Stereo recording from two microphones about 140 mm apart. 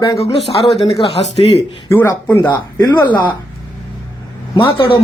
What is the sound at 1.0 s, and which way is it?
Speech, 45° left (ahead or behind).